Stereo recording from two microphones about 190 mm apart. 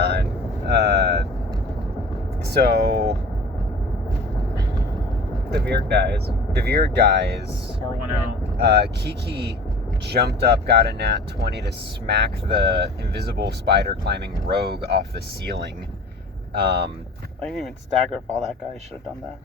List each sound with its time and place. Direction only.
0.0 s vehicle: 55° right (ahead or behind)
0.7 s a sound: 60° right (ahead or behind)
2.4 s speech: 55° right (ahead or behind)
5.5 s speech: 60° right (ahead or behind)
8.5 s speech: 60° right (ahead or behind)
17.4 s speech: centre (ahead or behind)